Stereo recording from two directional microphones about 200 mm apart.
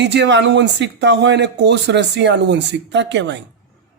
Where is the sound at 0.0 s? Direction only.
60° right (ahead or behind).